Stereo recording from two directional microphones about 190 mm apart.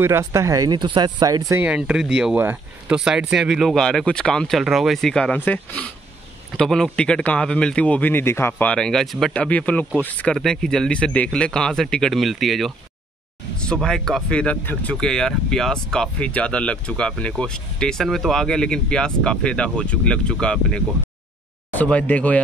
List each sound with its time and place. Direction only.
0.0 s speech: 15° right (ahead or behind)
1.5 s a man's voice: 5° right (ahead or behind)